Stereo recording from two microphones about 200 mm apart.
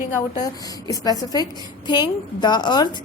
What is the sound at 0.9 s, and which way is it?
A woman's voice, 20° left (ahead or behind).